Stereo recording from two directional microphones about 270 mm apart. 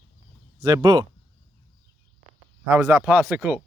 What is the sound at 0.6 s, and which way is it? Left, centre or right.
Speech, centre.